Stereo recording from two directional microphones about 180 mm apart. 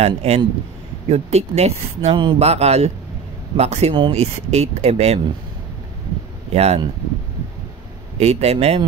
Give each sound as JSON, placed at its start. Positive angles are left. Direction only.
{"t": 0.0, "sound": "speech", "side_deg": -35}
{"t": 6.5, "sound": "speech", "side_deg": -35}
{"t": 8.2, "sound": "speech", "side_deg": -35}